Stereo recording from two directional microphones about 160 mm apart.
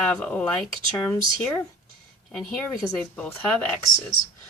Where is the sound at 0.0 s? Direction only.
5° left (ahead or behind).